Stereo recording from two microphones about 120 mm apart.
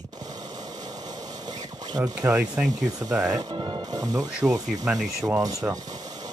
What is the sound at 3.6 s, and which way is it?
Speech, 35° right (ahead or behind).